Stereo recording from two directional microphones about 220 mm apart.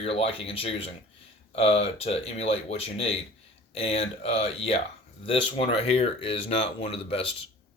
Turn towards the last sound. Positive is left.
turn(degrees=25)  # may be behind; listen again after turning